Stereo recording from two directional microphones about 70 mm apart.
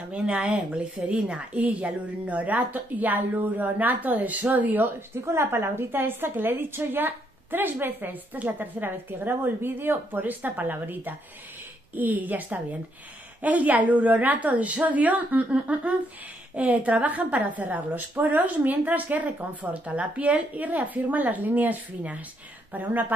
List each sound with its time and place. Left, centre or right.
0.1 s a woman's voice: centre
5.1 s a woman's voice: right